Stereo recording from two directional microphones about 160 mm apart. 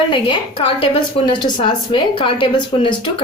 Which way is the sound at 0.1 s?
35° left (ahead or behind).